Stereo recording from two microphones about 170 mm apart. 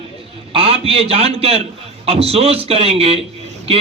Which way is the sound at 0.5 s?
35° right (ahead or behind).